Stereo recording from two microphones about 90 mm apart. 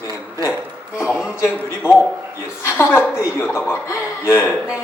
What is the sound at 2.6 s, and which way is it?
A man's voice, 30° left (ahead or behind).